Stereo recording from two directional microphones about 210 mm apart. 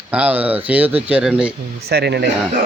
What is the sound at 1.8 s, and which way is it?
Speech, 50° right (ahead or behind).